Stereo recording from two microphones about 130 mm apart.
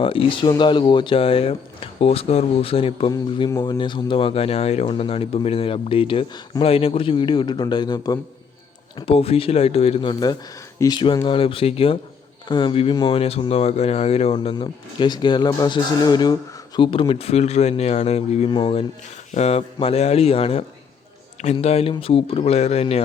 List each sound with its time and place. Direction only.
0.0 s a man's voice: 45° left (ahead or behind)
9.0 s a man's voice: 50° left (ahead or behind)
14.5 s speech: 35° left (ahead or behind); by 23.0 s 50° left (ahead or behind)